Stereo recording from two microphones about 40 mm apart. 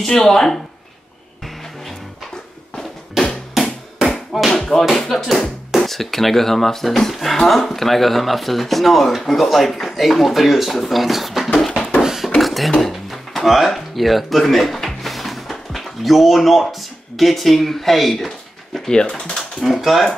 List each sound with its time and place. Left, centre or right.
0.0 s speech: centre
3.2 s drum: centre
4.5 s music: centre
5.8 s speech: centre
12.0 s a sound: centre
12.4 s a sound: centre
15.7 s speech: centre
18.9 s speech: left
19.6 s speech: centre